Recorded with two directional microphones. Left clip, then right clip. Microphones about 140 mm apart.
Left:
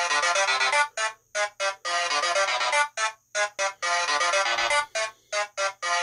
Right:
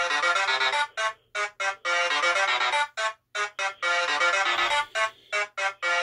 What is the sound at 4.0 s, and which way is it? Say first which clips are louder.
Music: even; 40° left (ahead or behind).